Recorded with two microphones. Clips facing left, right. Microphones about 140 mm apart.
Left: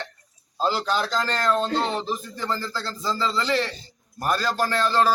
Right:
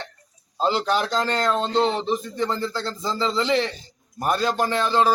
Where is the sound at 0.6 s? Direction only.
20° right (ahead or behind).